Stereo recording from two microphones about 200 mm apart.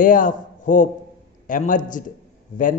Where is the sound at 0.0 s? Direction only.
40° left (ahead or behind).